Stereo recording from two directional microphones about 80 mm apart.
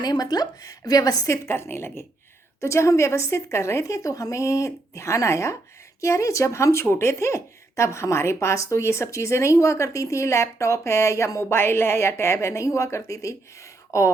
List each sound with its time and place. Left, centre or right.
0.0 s a woman's voice: left
1.3 s a woman's voice: left